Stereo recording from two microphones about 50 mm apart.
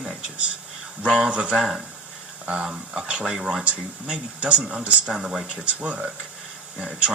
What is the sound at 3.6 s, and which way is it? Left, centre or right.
A man's voice, right.